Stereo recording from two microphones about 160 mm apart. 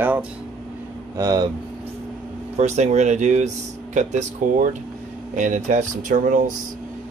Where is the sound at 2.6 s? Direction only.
45° right (ahead or behind).